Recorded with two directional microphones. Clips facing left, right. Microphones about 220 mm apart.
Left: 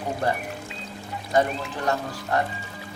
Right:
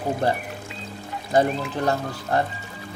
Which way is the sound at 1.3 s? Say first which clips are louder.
Right 3 dB; 30° right (ahead or behind).